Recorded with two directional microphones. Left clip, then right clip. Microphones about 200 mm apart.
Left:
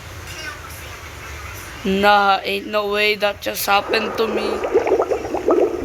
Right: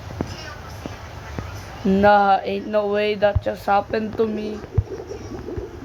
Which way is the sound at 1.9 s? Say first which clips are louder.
Left 1 dB; centre (ahead or behind).